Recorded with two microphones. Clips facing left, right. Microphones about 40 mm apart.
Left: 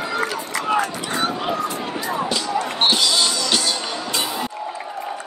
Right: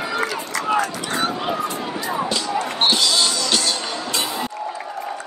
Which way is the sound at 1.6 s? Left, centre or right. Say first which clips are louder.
Even; centre.